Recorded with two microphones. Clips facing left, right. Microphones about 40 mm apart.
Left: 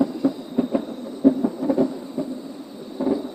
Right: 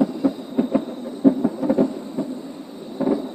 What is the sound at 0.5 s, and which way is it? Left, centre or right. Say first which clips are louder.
Thunder: right 2 dB; centre.